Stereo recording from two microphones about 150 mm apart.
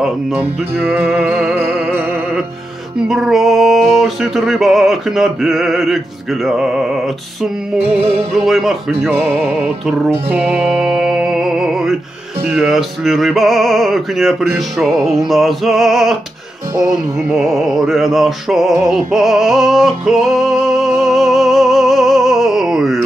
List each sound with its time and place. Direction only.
0.9 s music: 10° right (ahead or behind)
3.0 s music: centre (ahead or behind)
7.8 s music: 40° right (ahead or behind)
8.3 s music: centre (ahead or behind)
17.4 s music: centre (ahead or behind)